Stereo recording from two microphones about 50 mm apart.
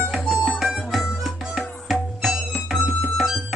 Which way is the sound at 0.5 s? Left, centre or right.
Centre.